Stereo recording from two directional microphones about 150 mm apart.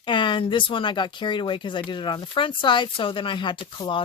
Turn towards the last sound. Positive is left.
turn(degrees=35)  # may be behind; listen again after turning